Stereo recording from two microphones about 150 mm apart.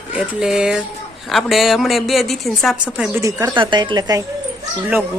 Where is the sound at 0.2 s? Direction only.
5° right (ahead or behind).